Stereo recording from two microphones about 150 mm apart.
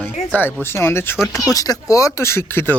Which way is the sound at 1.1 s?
5° right (ahead or behind).